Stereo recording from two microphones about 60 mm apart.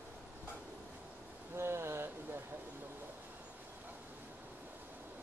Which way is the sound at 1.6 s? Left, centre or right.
Right.